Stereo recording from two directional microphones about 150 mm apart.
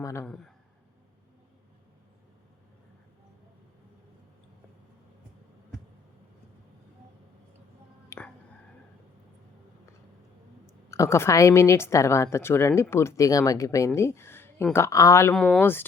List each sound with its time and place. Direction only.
0.0 s a man's voice: 20° left (ahead or behind)
0.3 s a man's voice: centre (ahead or behind)
8.1 s music: 20° left (ahead or behind)
10.9 s a woman's voice: 20° left (ahead or behind)
15.4 s speech: 5° left (ahead or behind)